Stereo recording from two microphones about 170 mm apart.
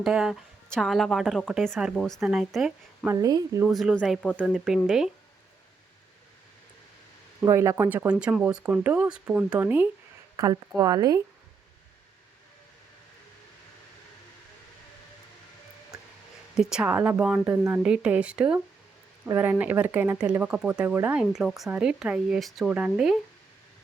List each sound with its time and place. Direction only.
0.0 s a woman's voice: 5° right (ahead or behind)
3.1 s speech: 20° right (ahead or behind)
3.7 s a woman's voice: centre (ahead or behind)
7.4 s speech: 20° right (ahead or behind)
10.3 s speech: 20° right (ahead or behind)
15.9 s a sound: 5° right (ahead or behind)
16.6 s speech: 5° right (ahead or behind)